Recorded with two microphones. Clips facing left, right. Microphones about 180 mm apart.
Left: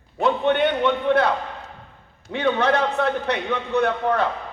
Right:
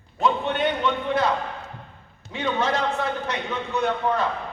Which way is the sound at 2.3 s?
60° left (ahead or behind).